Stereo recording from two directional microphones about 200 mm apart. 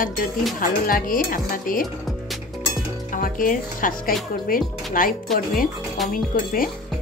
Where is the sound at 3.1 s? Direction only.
40° left (ahead or behind).